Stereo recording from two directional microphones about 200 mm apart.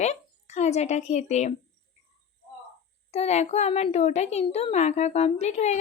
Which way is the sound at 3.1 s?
30° left (ahead or behind).